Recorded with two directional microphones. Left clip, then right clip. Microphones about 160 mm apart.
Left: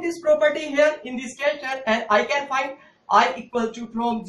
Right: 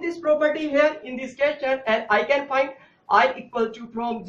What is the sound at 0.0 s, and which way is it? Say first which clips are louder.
Speech: left 2 dB; 15° right (ahead or behind).